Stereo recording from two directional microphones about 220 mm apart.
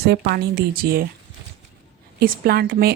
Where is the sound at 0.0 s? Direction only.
45° right (ahead or behind).